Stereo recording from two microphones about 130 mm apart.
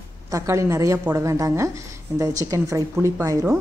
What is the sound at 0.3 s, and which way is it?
A woman's voice, 25° right (ahead or behind).